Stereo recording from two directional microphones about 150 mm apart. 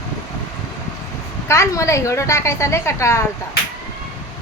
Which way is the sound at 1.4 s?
20° left (ahead or behind).